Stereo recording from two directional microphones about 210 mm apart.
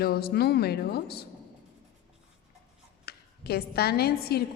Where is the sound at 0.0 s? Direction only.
45° left (ahead or behind).